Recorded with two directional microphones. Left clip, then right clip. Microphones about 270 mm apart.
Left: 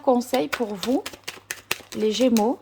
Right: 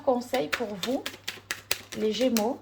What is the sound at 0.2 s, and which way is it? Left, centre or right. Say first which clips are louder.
Speech: left 4 dB; left.